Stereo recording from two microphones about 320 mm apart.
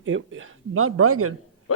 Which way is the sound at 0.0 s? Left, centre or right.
Right.